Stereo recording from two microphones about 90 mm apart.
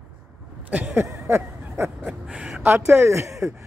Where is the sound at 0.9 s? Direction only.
30° right (ahead or behind).